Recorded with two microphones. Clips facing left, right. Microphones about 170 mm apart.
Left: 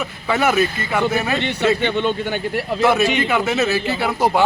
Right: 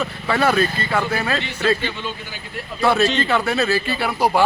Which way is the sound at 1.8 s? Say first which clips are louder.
Left 9 dB; 65° left (ahead or behind).